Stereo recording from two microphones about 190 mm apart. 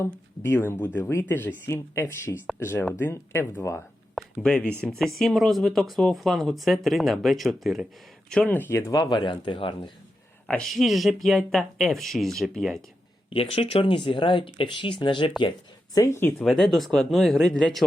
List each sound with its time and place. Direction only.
0.0 s speech: 15° left (ahead or behind)
4.1 s speech: 5° left (ahead or behind); by 9.9 s 25° left (ahead or behind)
10.5 s speech: centre (ahead or behind)
13.3 s speech: 30° left (ahead or behind)
16.0 s speech: 15° left (ahead or behind)
16.5 s speech: centre (ahead or behind)